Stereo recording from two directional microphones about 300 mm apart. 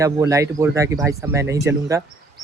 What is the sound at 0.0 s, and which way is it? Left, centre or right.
Speech, centre.